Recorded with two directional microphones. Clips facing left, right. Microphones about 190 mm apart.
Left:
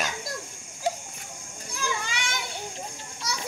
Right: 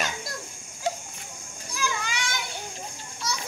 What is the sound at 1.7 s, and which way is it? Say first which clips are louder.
Children playing: right 1 dB; 25° left (ahead or behind).